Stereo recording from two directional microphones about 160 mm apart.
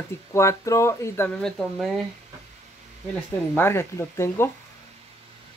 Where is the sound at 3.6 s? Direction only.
15° left (ahead or behind).